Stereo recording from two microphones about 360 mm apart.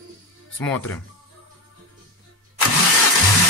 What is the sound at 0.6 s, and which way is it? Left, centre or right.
Speech, centre.